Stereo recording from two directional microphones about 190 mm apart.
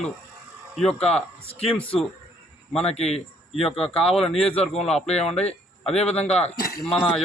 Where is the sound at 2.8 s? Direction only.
35° left (ahead or behind).